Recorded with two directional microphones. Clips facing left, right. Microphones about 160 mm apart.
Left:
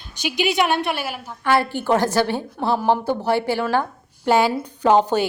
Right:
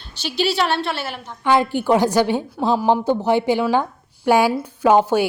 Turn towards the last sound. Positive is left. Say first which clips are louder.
# right 1 dB
turn(degrees=-10)  # may be behind; listen again after turning